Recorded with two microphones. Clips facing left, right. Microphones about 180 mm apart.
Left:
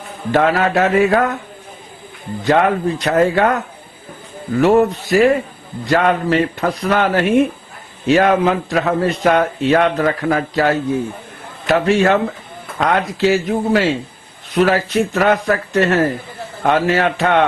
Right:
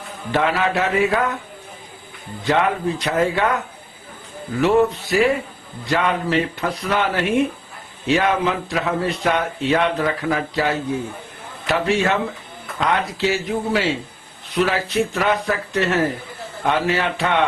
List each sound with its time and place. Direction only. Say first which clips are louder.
0.3 s a man's voice: left 5 dB; 45° left (ahead or behind)
2.4 s a man's voice: left 5 dB; 50° left (ahead or behind)
4.6 s a man's voice: left 3 dB; 45° left (ahead or behind)